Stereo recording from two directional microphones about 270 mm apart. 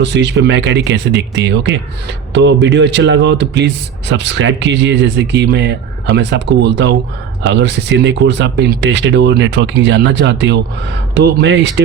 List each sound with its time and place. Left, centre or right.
0.0 s speech: right